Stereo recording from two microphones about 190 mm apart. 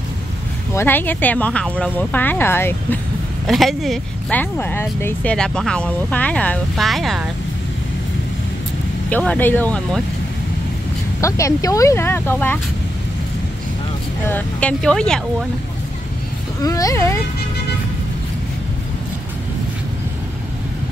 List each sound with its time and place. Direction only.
0.7 s speech: 10° left (ahead or behind)
3.4 s speech: centre (ahead or behind)
9.1 s speech: 10° left (ahead or behind)
11.1 s speech: 15° left (ahead or behind)
14.2 s speech: 10° left (ahead or behind)
16.6 s speech: 15° left (ahead or behind)